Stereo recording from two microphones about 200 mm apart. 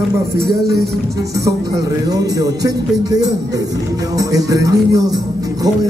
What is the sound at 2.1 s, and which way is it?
Speech, 20° right (ahead or behind).